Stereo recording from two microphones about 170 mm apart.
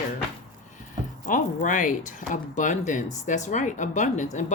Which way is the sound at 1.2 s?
50° left (ahead or behind).